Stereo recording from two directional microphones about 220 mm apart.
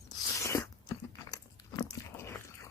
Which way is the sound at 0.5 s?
15° left (ahead or behind).